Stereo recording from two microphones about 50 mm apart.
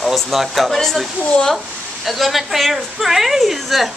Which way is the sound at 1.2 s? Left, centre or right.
Left.